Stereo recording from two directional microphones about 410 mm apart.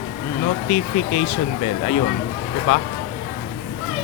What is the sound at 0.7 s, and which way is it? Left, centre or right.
Speech, centre.